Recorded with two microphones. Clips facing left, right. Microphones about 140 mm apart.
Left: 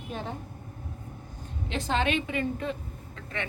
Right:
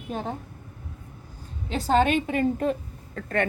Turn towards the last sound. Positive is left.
turn(degrees=-50)  # may be behind; listen again after turning